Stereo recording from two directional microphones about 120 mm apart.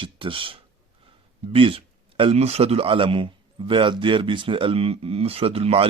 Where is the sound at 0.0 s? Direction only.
45° right (ahead or behind).